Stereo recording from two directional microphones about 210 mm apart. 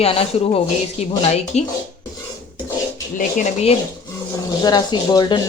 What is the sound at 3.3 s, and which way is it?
Speech, 30° left (ahead or behind).